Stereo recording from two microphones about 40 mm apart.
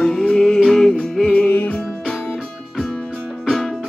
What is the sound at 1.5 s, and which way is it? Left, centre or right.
Music, left.